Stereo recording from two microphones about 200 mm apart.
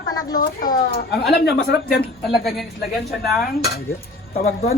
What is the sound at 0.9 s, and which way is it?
Speech, 55° left (ahead or behind).